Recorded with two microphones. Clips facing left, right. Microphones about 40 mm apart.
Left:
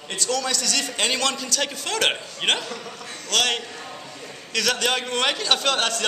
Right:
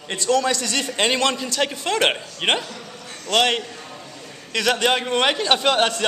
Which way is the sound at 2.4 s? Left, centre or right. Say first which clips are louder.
Right 2 dB; centre.